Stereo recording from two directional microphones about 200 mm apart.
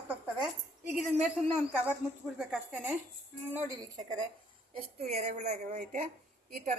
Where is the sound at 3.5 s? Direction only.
20° right (ahead or behind).